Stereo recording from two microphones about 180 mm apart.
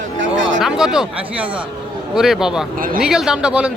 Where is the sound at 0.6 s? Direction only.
5° right (ahead or behind).